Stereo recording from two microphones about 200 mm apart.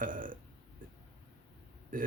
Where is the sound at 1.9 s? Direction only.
45° right (ahead or behind).